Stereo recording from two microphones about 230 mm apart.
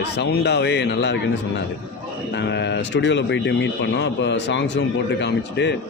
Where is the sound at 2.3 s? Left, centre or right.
Left.